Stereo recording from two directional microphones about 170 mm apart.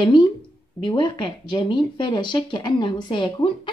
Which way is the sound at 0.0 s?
25° left (ahead or behind).